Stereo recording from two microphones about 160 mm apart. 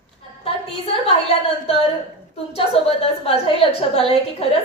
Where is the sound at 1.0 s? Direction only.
35° left (ahead or behind).